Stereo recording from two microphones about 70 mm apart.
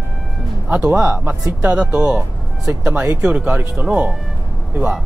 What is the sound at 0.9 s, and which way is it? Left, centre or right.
Speech, right.